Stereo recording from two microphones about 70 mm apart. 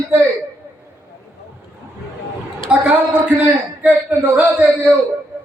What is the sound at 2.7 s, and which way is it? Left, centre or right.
A woman's voice, centre.